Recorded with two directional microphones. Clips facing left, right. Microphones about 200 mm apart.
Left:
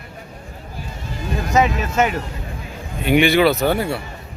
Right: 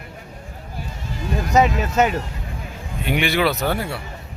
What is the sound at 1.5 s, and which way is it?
Speech, 35° right (ahead or behind).